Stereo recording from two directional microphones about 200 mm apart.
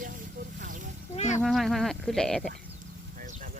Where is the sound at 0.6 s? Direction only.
40° right (ahead or behind).